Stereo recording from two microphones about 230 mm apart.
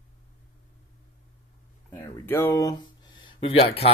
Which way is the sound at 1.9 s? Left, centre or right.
Centre.